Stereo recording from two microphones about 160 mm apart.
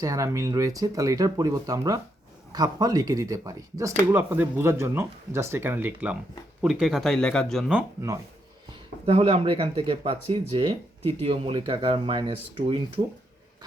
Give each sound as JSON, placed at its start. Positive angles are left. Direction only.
{"t": 0.0, "sound": "speech", "side_deg": -20}
{"t": 8.7, "sound": "speech", "side_deg": -40}